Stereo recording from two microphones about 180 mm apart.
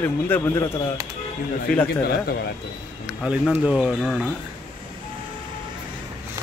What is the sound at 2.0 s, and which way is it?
Speech, 60° left (ahead or behind).